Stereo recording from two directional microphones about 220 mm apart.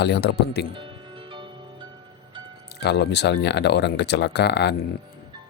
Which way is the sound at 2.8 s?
50° left (ahead or behind).